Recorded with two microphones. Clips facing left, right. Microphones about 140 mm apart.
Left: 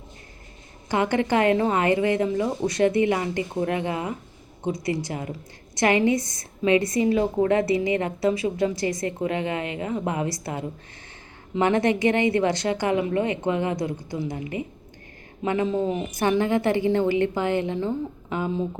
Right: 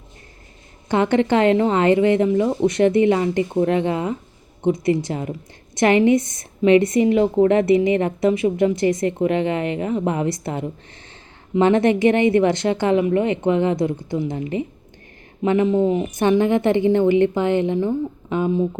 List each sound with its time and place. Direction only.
0.9 s a woman's voice: 25° right (ahead or behind)